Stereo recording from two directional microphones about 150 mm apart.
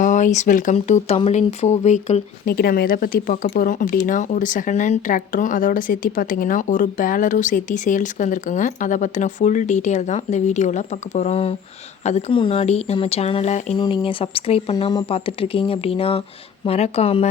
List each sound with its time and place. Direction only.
0.0 s speech: 55° left (ahead or behind)
2.5 s speech: 90° left; by 13.7 s 50° left (ahead or behind)
13.7 s speech: 35° left (ahead or behind)
14.8 s speech: 25° left (ahead or behind)
15.1 s speech: 40° left (ahead or behind)